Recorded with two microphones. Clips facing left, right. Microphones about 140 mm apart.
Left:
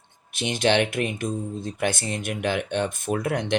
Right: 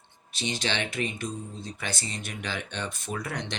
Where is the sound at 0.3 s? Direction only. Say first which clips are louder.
Left 9 dB; 55° left (ahead or behind).